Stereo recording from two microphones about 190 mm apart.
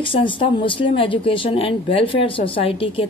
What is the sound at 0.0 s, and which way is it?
Speech, 25° left (ahead or behind).